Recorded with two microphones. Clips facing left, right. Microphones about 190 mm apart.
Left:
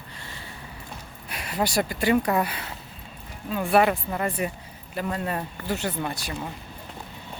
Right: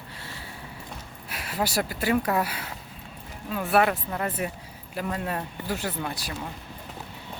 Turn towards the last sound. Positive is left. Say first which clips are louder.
# left 2 dB
turn(degrees=0)  # may be behind; listen again after turning